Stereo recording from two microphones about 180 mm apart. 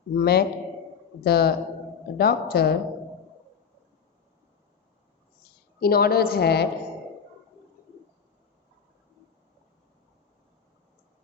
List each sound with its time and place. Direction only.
0.2 s a woman's voice: 60° left (ahead or behind)
5.8 s a woman's voice: 60° left (ahead or behind)